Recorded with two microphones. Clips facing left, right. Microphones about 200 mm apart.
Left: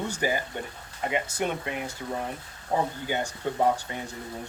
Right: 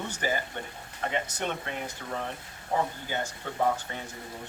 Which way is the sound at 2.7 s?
20° left (ahead or behind).